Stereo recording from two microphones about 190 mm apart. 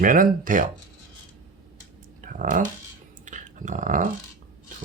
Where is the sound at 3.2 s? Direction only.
40° right (ahead or behind).